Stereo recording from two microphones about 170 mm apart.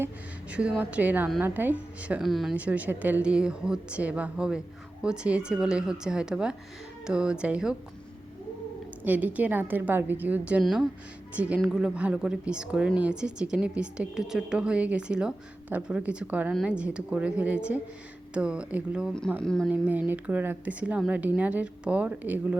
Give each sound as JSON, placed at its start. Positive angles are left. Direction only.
{"t": 0.5, "sound": "a woman's voice", "side_deg": -5}
{"t": 9.0, "sound": "a woman's voice", "side_deg": -10}
{"t": 19.7, "sound": "a woman's voice", "side_deg": -10}